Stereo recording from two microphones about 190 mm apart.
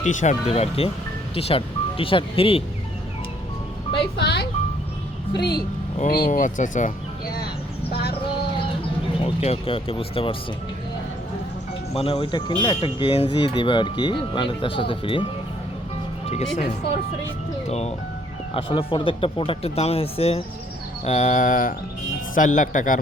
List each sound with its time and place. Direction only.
0.0 s speech: 40° left (ahead or behind)
4.2 s music: 60° left (ahead or behind)
5.3 s speech: 60° left (ahead or behind)
6.0 s speech: 50° left (ahead or behind)
7.9 s vehicle: 55° left (ahead or behind)
9.2 s speech: 30° left (ahead or behind)
11.9 s speech: 30° left (ahead or behind)